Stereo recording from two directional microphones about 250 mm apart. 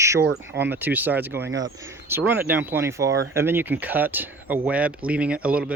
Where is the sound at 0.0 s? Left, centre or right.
Centre.